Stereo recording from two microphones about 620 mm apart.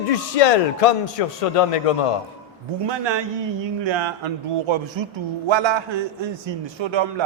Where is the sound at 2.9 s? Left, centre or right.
Right.